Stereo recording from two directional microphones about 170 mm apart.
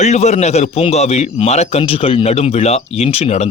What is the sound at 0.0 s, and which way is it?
A man's voice, 40° left (ahead or behind).